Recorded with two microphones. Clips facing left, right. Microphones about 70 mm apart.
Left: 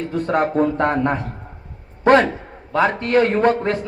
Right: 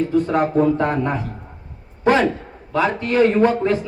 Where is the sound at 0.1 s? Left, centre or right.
Left.